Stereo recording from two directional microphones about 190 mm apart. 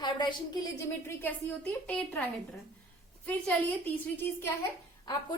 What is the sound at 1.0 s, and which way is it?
A woman's voice, 10° left (ahead or behind).